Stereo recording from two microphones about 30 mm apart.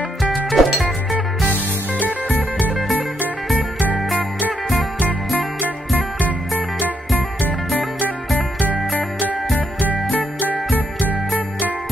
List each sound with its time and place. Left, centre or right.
0.5 s music: centre
5.9 s music: right